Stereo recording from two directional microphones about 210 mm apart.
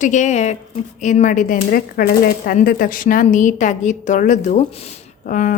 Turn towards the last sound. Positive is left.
turn(degrees=40)  # may be behind; listen again after turning